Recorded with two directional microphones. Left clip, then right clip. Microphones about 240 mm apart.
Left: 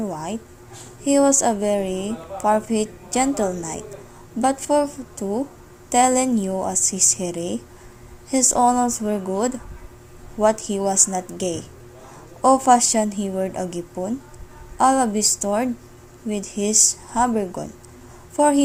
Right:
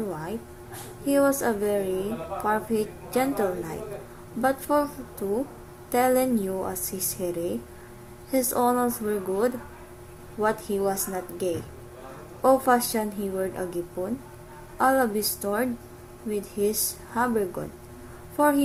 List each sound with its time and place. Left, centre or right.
0.1 s a woman's voice: left
5.9 s a woman's voice: left